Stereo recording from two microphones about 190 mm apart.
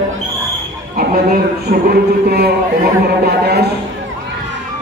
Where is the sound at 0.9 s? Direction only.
50° right (ahead or behind).